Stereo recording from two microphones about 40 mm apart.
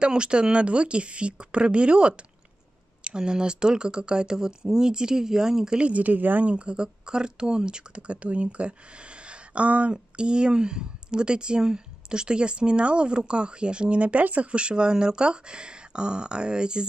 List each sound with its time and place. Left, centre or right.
0.0 s speech: right
5.8 s speech: right
6.5 s speech: right
8.1 s speech: right